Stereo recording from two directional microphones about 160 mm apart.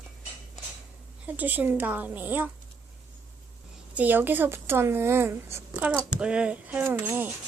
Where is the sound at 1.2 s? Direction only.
10° right (ahead or behind).